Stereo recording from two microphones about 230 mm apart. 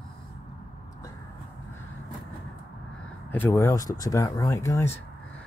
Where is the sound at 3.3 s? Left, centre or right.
Centre.